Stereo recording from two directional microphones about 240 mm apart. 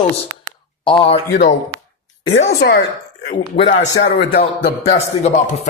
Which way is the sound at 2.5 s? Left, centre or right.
Left.